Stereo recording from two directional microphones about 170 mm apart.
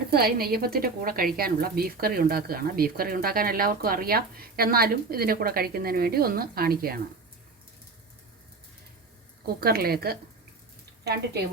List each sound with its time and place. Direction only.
0.1 s a woman's voice: 65° right (ahead or behind)
9.6 s a woman's voice: 65° right (ahead or behind)